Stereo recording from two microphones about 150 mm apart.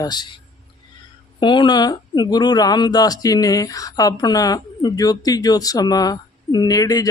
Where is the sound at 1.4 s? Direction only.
30° left (ahead or behind).